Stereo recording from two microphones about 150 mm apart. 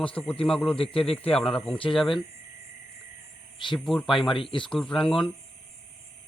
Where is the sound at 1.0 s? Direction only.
5° left (ahead or behind).